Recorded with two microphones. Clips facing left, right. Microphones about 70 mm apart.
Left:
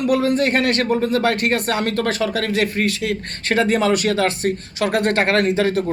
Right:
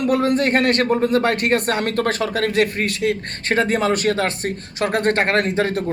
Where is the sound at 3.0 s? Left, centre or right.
Right.